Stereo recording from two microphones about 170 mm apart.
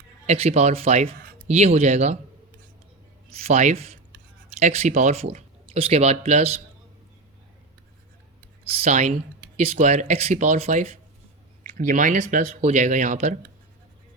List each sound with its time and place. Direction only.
0.3 s speech: 35° right (ahead or behind)
3.2 s speech: 40° right (ahead or behind)
8.8 s speech: 45° right (ahead or behind)